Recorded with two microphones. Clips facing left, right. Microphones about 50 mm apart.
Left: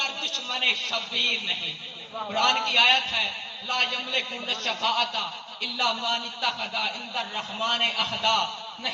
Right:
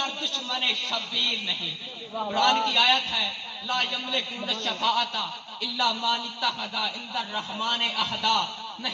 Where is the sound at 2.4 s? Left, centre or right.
Left.